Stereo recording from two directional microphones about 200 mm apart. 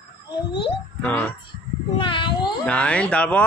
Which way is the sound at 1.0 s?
5° left (ahead or behind).